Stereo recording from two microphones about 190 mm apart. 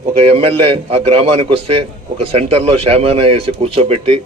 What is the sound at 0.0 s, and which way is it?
A man's voice, 30° right (ahead or behind).